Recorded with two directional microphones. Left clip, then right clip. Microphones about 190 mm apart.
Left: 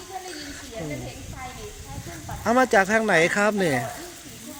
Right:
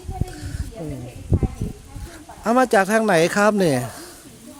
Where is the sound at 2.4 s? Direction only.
40° right (ahead or behind).